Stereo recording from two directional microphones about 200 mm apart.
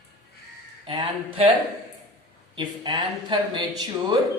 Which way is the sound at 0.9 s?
25° right (ahead or behind).